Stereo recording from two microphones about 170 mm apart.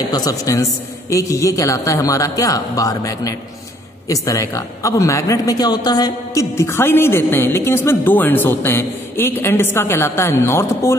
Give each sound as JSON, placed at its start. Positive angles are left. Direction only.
{"t": 0.1, "sound": "a man's voice", "side_deg": 20}